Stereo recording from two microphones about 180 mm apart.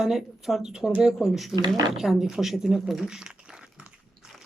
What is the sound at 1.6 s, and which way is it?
Speech, 25° right (ahead or behind).